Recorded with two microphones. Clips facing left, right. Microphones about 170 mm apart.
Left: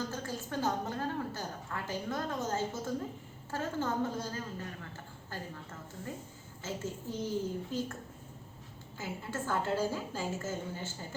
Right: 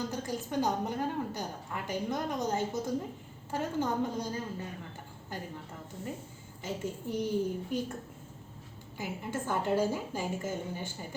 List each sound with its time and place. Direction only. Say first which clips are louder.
0.1 s a woman's voice: right 3 dB; 15° right (ahead or behind)
6.6 s a woman's voice: right 2 dB; 15° right (ahead or behind)
9.0 s a woman's voice: right 2 dB; 15° right (ahead or behind)